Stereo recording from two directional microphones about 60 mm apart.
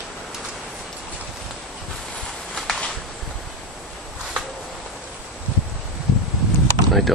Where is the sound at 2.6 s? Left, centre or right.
Centre.